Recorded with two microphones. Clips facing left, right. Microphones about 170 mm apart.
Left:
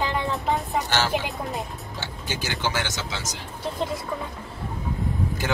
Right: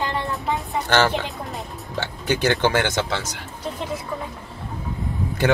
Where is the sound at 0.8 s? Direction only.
55° right (ahead or behind).